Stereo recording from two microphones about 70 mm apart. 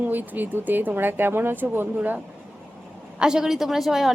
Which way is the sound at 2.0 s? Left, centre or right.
Centre.